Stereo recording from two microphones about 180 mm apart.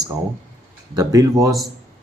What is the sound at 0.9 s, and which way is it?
Speech, 20° right (ahead or behind).